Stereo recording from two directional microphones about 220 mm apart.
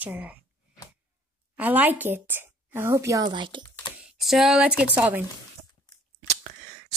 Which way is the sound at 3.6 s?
15° left (ahead or behind).